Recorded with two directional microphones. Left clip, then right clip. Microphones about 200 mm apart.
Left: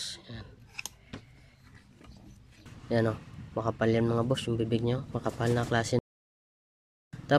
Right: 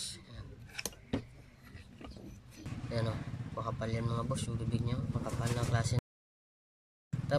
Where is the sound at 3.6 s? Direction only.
45° left (ahead or behind).